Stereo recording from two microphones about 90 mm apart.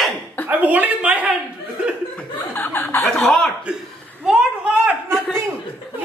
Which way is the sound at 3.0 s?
5° left (ahead or behind).